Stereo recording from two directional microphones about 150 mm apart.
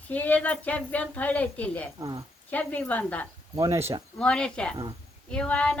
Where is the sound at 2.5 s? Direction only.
10° left (ahead or behind).